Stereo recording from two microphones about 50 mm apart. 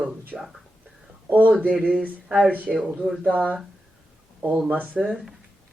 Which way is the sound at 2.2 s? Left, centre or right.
Centre.